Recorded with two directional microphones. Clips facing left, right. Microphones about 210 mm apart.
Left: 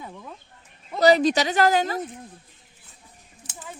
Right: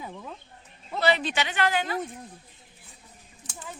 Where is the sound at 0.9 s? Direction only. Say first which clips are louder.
Left 8 dB; 40° left (ahead or behind).